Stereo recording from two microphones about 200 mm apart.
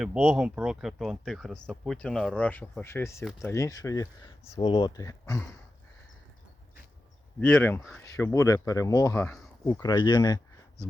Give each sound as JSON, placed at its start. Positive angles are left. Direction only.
{"t": 0.0, "sound": "speech", "side_deg": 0}
{"t": 4.4, "sound": "speech", "side_deg": 30}
{"t": 7.3, "sound": "speech", "side_deg": 10}
{"t": 8.1, "sound": "speech", "side_deg": 15}
{"t": 9.2, "sound": "speech", "side_deg": 5}
{"t": 9.6, "sound": "speech", "side_deg": 20}